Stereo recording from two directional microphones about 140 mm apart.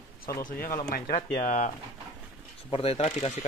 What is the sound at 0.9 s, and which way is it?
Speech, 70° left (ahead or behind).